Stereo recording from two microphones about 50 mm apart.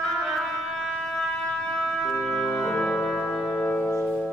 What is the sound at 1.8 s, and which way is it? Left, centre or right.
Organ, centre.